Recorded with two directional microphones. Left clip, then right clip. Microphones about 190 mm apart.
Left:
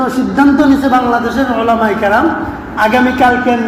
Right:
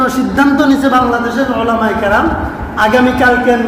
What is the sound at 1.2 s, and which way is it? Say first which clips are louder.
Speech: left 1 dB; 20° left (ahead or behind).